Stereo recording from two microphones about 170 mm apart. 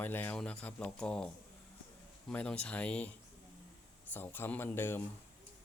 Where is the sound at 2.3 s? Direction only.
5° left (ahead or behind).